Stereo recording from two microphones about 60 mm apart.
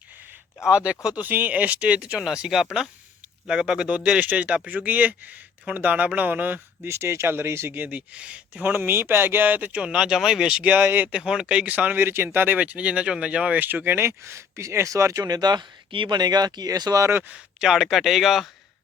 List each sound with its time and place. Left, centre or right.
0.6 s speech: centre
6.8 s speech: right
7.8 s speech: right
8.6 s speech: right; by 10.6 s centre
10.6 s speech: right
11.1 s speech: centre; by 11.9 s right
11.9 s speech: right
12.5 s speech: right
13.6 s speech: right
14.8 s speech: right
17.6 s speech: centre